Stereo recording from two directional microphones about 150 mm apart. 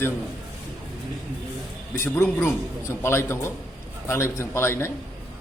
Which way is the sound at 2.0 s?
15° left (ahead or behind).